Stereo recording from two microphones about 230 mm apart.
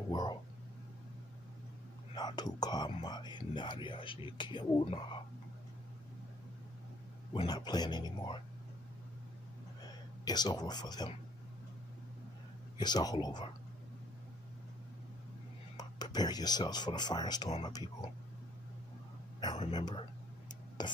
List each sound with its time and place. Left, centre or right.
0.1 s a sound: centre
2.1 s speech: centre
7.3 s speech: centre
10.2 s speech: centre
12.7 s speech: centre
15.8 s speech: centre
19.4 s speech: left